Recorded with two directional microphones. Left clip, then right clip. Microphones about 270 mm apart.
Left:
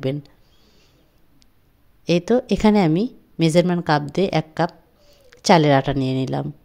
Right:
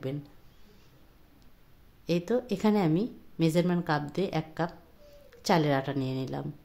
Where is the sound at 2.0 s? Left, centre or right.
Left.